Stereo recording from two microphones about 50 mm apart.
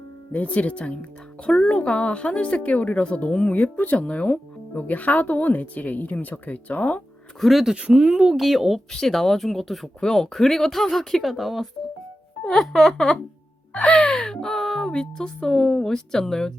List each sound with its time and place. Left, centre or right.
0.3 s speech: left
7.4 s speech: centre
7.8 s speech: centre
8.4 s speech: centre
8.9 s speech: centre
13.7 s speech: left
14.1 s speech: centre
14.9 s speech: centre